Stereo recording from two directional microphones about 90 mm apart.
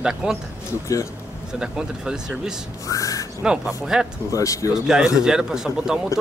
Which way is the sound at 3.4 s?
10° right (ahead or behind).